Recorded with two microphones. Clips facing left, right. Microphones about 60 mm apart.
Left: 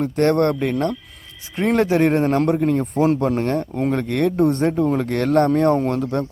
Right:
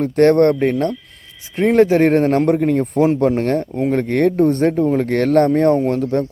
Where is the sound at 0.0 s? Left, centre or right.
Right.